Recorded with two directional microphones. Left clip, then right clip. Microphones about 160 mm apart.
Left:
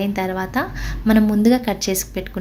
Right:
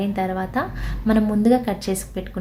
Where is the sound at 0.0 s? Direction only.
15° left (ahead or behind).